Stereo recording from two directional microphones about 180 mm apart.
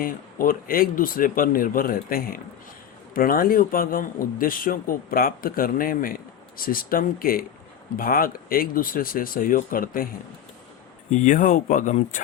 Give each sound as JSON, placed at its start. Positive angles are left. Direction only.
{"t": 0.0, "sound": "speech", "side_deg": 50}
{"t": 11.1, "sound": "speech", "side_deg": 45}